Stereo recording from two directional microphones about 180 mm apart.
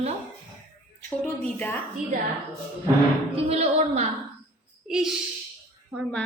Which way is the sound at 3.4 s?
35° right (ahead or behind).